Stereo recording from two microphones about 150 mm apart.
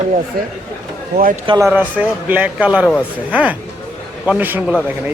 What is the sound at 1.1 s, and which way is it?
Speech, 90° right.